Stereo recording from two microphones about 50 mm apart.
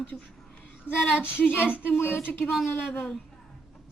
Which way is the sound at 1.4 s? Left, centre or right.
Left.